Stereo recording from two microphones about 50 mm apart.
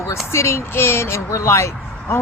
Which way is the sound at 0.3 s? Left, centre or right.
Left.